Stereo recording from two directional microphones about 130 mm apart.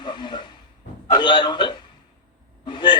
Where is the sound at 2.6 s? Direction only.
40° left (ahead or behind).